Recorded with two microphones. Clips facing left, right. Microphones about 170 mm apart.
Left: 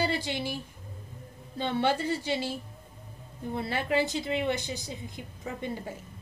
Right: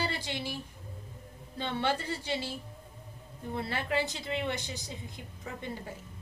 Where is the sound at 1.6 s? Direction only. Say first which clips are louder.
Left 4 dB; 15° left (ahead or behind).